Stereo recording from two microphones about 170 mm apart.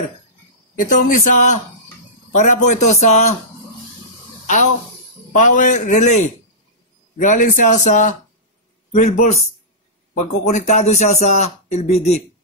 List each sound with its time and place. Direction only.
0.7 s a man's voice: 50° left (ahead or behind)
5.3 s a man's voice: 50° left (ahead or behind)